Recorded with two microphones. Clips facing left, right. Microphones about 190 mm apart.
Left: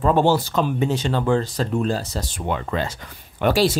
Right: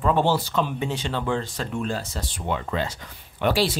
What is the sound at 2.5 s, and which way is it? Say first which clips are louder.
Speech: left 2 dB; 50° left (ahead or behind).